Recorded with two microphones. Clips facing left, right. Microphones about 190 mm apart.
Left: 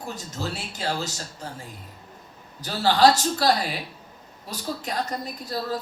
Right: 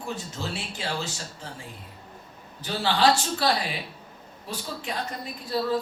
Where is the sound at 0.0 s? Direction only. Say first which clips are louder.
Left 1 dB; 40° left (ahead or behind).